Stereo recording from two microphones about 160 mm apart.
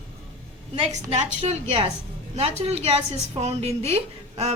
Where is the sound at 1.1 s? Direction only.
45° right (ahead or behind).